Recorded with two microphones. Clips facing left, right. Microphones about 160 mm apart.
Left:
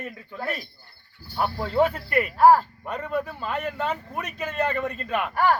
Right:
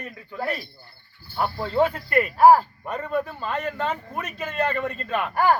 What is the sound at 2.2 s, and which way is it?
A man's voice, 5° right (ahead or behind).